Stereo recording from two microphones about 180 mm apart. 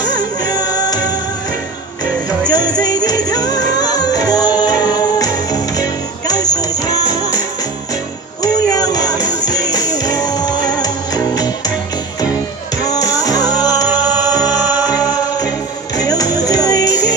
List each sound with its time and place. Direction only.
0.0 s music: 20° left (ahead or behind)
2.4 s music: 20° left (ahead or behind)
8.4 s music: 20° left (ahead or behind)
12.8 s music: 20° left (ahead or behind)
14.6 s music: 10° right (ahead or behind)
15.0 s music: 20° left (ahead or behind)